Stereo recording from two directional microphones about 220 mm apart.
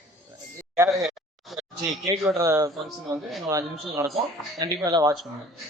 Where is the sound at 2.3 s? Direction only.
15° right (ahead or behind).